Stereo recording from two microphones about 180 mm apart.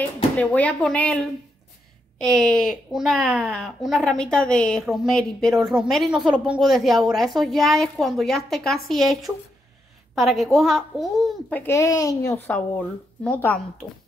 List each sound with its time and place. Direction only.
0.4 s a woman's voice: 10° left (ahead or behind)
2.3 s speech: 5° left (ahead or behind)
11.6 s a woman's voice: 15° left (ahead or behind)